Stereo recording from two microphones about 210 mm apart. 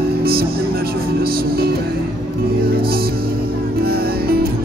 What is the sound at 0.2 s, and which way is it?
Music, 45° right (ahead or behind).